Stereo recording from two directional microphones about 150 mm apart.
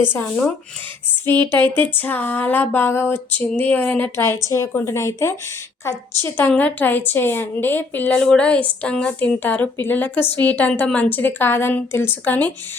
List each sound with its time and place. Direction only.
0.1 s a woman's voice: 15° left (ahead or behind)
1.5 s a woman's voice: 15° left (ahead or behind)